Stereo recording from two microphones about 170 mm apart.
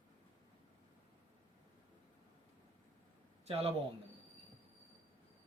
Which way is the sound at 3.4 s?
35° right (ahead or behind).